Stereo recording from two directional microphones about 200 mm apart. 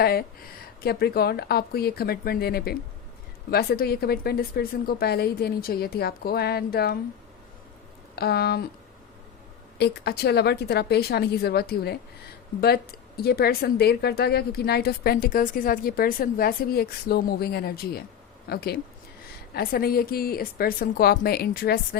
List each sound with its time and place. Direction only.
0.0 s a woman's voice: 50° left (ahead or behind)
8.1 s a woman's voice: 50° left (ahead or behind)
9.7 s a woman's voice: 55° left (ahead or behind)